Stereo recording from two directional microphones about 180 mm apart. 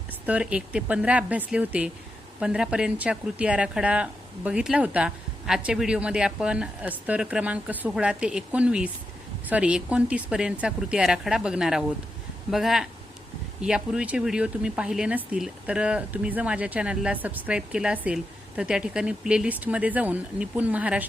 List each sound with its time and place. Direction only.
0.1 s speech: 5° right (ahead or behind)